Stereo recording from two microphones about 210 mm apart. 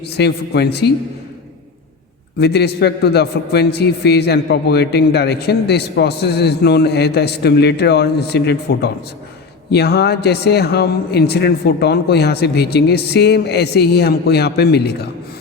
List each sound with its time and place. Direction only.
0.2 s a man's voice: 50° left (ahead or behind)
2.4 s a man's voice: 50° left (ahead or behind)